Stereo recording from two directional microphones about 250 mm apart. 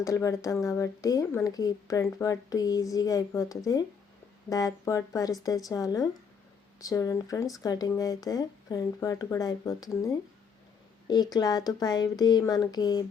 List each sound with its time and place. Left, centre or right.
0.0 s speech: centre